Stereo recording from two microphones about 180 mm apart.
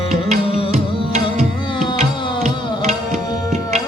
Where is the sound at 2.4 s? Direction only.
40° right (ahead or behind).